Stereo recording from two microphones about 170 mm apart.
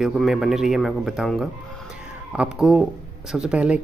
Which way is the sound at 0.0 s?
Centre (ahead or behind).